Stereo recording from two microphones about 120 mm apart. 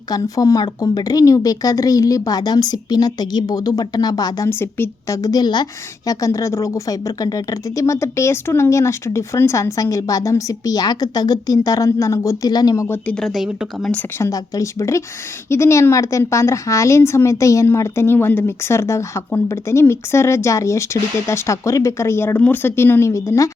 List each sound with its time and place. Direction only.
0.1 s a woman's voice: 30° left (ahead or behind)
4.4 s a woman's voice: 20° left (ahead or behind)
13.1 s speech: 5° left (ahead or behind)
14.2 s a woman's voice: 30° left (ahead or behind)